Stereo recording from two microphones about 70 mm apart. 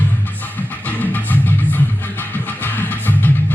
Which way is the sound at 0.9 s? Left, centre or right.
Left.